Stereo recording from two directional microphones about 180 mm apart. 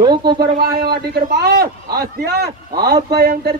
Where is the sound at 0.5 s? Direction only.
60° right (ahead or behind).